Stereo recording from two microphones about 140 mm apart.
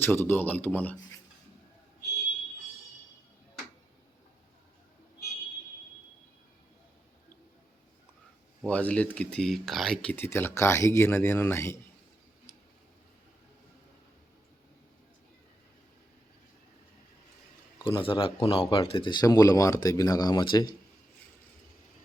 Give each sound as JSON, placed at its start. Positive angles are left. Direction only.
{"t": 0.0, "sound": "speech", "side_deg": 15}
{"t": 8.6, "sound": "speech", "side_deg": 10}
{"t": 17.8, "sound": "speech", "side_deg": 40}